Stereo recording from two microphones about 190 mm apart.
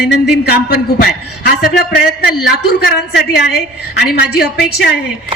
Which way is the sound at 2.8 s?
60° left (ahead or behind).